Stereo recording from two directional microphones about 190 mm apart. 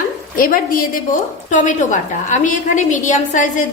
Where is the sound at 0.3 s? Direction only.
45° left (ahead or behind).